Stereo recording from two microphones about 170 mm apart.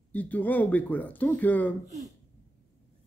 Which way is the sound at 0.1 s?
10° left (ahead or behind).